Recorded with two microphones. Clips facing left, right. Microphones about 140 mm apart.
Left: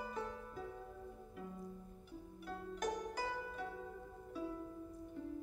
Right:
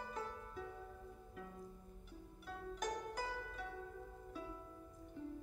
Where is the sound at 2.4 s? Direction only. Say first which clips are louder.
Left 2 dB; centre (ahead or behind).